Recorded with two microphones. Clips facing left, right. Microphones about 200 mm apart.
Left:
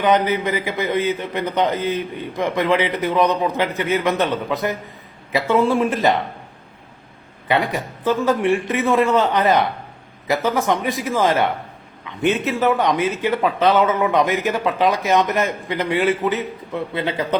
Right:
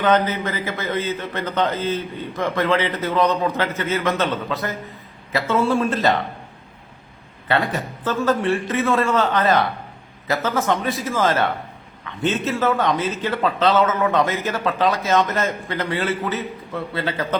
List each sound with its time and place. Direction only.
0.0 s a man's voice: 15° left (ahead or behind)
7.4 s a man's voice: 15° left (ahead or behind)